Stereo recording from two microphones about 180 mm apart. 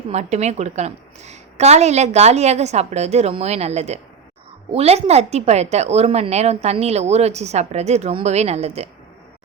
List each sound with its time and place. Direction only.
0.1 s a woman's voice: 40° right (ahead or behind)